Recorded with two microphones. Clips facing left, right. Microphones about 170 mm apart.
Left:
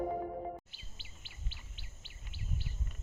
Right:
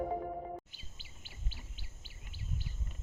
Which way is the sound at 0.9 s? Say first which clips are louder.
Right 1 dB; 45° right (ahead or behind).